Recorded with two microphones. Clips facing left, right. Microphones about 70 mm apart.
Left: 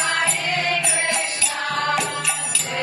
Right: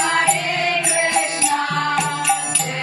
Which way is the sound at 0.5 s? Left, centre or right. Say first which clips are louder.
Right 2 dB; right.